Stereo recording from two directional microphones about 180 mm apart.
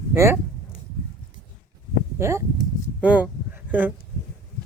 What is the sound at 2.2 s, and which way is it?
Speech, 15° right (ahead or behind).